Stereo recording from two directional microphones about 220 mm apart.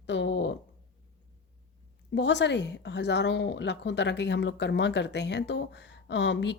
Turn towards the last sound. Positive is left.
turn(degrees=55)  # may be behind; listen again after turning